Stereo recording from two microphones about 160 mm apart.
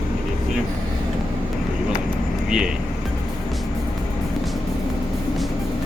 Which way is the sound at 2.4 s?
5° right (ahead or behind).